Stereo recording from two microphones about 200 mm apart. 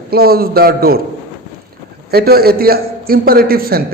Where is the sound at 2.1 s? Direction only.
50° right (ahead or behind).